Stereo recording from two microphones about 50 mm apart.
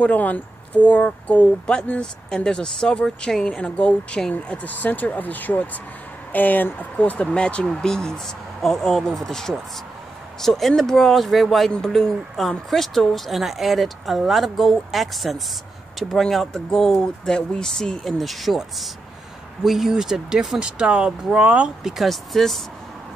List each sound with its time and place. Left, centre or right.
0.0 s speech: left
7.2 s speech: centre
18.0 s speech: centre
19.6 s speech: centre
21.8 s speech: centre